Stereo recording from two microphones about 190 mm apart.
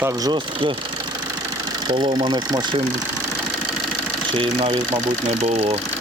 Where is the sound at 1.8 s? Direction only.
20° right (ahead or behind).